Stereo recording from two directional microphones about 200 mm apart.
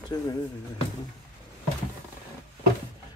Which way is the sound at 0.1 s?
20° left (ahead or behind).